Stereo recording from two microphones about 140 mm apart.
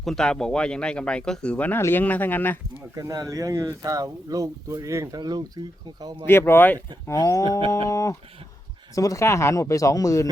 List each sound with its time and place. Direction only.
0.0 s speech: 5° left (ahead or behind)
2.9 s speech: 25° right (ahead or behind)
6.2 s speech: 15° left (ahead or behind)